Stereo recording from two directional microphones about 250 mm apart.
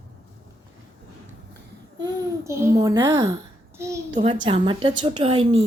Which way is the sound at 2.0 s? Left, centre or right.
Centre.